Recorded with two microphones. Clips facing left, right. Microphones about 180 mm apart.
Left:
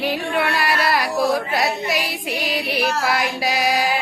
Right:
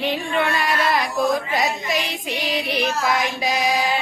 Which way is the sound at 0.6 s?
70° left (ahead or behind).